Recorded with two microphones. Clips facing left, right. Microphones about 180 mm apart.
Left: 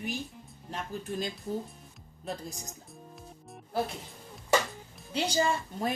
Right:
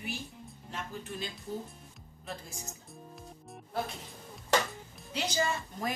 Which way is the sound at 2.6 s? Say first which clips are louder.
Even; centre (ahead or behind).